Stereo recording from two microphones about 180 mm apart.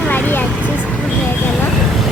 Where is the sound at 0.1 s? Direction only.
10° left (ahead or behind).